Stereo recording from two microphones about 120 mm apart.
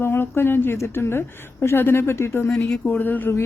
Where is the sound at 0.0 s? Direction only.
20° left (ahead or behind).